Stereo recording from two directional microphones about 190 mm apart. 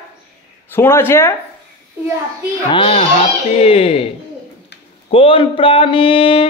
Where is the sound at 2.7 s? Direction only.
30° left (ahead or behind).